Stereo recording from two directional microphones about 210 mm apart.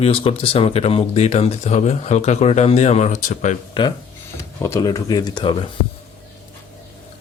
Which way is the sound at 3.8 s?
25° left (ahead or behind).